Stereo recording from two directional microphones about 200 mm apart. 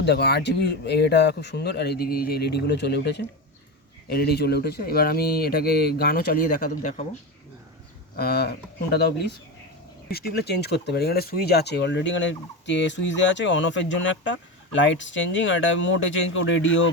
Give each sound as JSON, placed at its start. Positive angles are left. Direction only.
{"t": 0.0, "sound": "speech", "side_deg": 55}
{"t": 8.1, "sound": "speech", "side_deg": 50}
{"t": 10.1, "sound": "speech", "side_deg": 50}